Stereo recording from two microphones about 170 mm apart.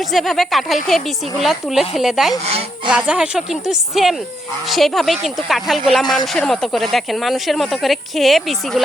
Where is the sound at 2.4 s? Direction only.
35° right (ahead or behind).